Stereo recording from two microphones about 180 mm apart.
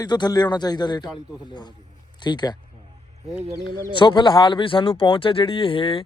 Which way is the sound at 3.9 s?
25° left (ahead or behind).